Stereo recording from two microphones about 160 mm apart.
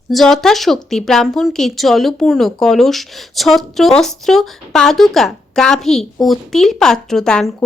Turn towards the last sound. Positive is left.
turn(degrees=5)  # may be behind; listen again after turning